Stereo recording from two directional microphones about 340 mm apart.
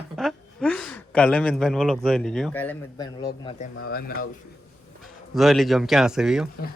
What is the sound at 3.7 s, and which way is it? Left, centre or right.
Speech, left.